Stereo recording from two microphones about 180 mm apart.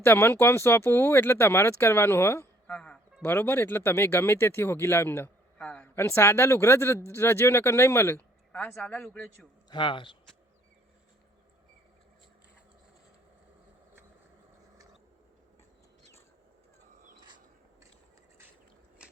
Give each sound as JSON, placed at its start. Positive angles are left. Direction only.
{"t": 0.0, "sound": "speech", "side_deg": 15}
{"t": 9.6, "sound": "speech", "side_deg": 25}
{"t": 17.2, "sound": "a sound", "side_deg": -25}
{"t": 19.0, "sound": "biting", "side_deg": -5}